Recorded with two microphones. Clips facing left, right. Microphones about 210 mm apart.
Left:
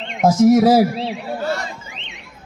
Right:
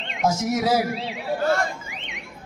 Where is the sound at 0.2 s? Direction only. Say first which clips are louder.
Left 11 dB; 55° left (ahead or behind).